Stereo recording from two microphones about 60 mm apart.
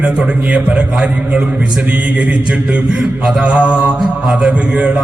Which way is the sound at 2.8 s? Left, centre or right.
Centre.